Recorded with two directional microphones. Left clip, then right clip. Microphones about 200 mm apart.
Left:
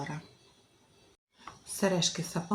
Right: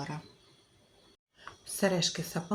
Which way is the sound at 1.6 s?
Centre (ahead or behind).